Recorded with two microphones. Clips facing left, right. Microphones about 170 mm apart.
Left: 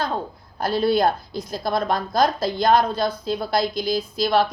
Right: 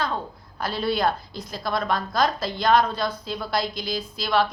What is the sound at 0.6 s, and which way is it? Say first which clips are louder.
A woman's voice: left 5 dB; 45° left (ahead or behind).